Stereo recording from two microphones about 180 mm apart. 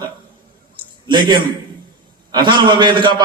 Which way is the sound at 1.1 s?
25° right (ahead or behind).